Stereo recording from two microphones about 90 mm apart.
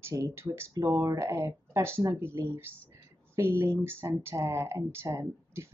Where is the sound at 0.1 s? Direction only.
35° right (ahead or behind).